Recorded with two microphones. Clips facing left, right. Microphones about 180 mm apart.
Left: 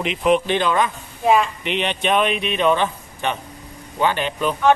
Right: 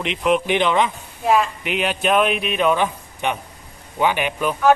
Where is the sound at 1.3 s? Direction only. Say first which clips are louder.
Left 1 dB; 5° right (ahead or behind).